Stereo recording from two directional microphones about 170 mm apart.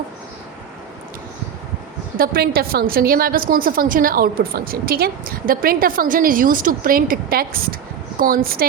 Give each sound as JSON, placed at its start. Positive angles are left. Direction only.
{"t": 2.1, "sound": "a woman's voice", "side_deg": -60}